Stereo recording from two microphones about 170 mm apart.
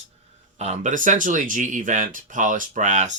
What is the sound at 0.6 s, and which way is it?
Speech, 45° right (ahead or behind).